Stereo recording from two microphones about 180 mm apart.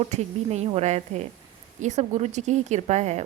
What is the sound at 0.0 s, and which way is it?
Speech, 35° right (ahead or behind).